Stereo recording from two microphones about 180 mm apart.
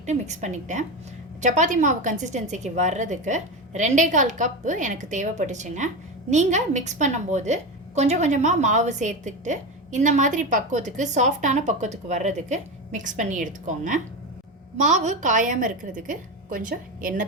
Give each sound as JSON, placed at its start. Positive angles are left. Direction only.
{"t": 0.0, "sound": "a woman's voice", "side_deg": -40}